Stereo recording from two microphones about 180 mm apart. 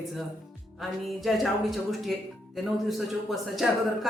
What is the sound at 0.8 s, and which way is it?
Speech, centre (ahead or behind).